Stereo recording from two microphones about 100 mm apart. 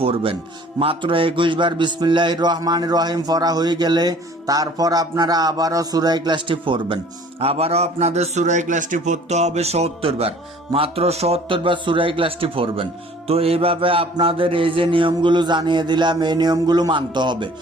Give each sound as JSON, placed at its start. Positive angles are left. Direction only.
{"t": 0.0, "sound": "a man's voice", "side_deg": -65}
{"t": 9.3, "sound": "speech", "side_deg": -90}